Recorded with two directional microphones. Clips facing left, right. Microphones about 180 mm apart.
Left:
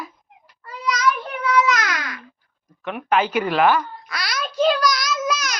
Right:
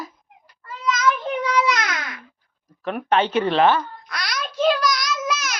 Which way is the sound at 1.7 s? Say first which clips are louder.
Left 1 dB; 20° right (ahead or behind).